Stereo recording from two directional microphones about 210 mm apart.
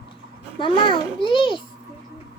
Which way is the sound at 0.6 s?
25° left (ahead or behind).